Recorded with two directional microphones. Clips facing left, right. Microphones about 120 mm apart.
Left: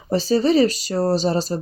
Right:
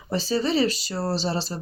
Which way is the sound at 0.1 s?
40° left (ahead or behind).